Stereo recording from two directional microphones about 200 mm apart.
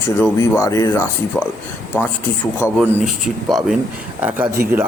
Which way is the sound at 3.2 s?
Centre (ahead or behind).